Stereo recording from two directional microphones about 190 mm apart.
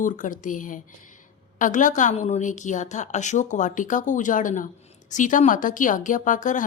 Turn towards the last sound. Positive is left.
turn(degrees=40)  # may be behind; listen again after turning